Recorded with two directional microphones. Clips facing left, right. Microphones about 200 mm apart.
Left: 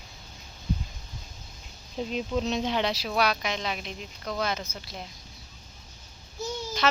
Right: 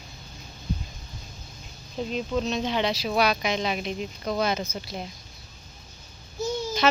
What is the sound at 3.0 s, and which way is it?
Speech, 10° right (ahead or behind).